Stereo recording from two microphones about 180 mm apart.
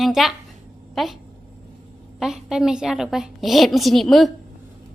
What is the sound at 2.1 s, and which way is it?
Speech, centre (ahead or behind).